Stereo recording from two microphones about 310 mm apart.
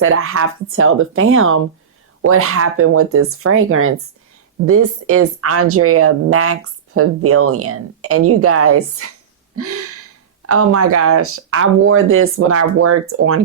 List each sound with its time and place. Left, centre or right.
0.0 s speech: right
9.6 s a sound: right
10.4 s speech: right